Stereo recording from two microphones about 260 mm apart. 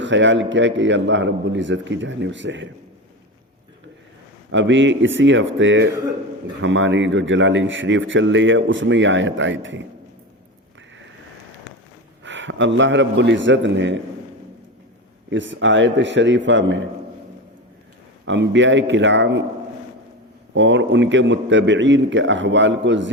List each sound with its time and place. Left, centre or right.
0.0 s a man's voice: right
4.5 s a man's voice: right
12.2 s a man's voice: right
15.3 s a man's voice: right
18.3 s a man's voice: right
20.5 s a man's voice: right